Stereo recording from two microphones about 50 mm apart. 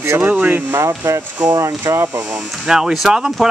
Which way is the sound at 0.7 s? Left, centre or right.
Right.